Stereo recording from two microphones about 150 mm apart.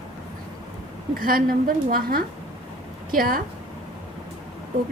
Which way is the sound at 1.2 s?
70° right (ahead or behind).